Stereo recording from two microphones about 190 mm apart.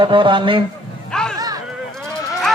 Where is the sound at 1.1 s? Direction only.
5° left (ahead or behind).